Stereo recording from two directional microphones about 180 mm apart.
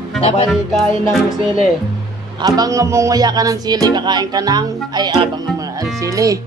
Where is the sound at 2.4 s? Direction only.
20° right (ahead or behind).